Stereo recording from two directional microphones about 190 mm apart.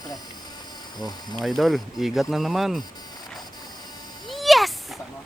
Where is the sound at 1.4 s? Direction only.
Centre (ahead or behind).